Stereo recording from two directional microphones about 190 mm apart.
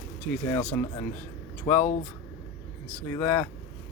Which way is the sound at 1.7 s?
40° left (ahead or behind).